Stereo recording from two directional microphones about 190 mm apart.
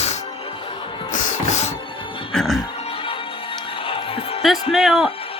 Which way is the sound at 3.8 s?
30° left (ahead or behind).